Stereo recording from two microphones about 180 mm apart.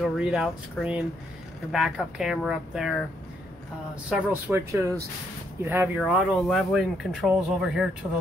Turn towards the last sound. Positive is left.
turn(degrees=0)  # may be behind; listen again after turning